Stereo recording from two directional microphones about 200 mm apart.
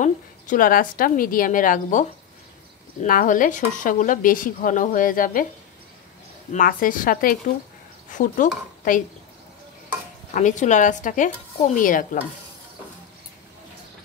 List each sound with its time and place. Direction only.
0.0 s a woman's voice: 40° left (ahead or behind)
6.5 s a woman's voice: 45° left (ahead or behind)
10.3 s a woman's voice: 40° left (ahead or behind)